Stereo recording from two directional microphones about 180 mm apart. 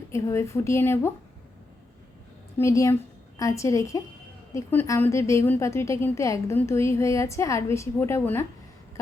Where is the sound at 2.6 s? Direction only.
15° left (ahead or behind).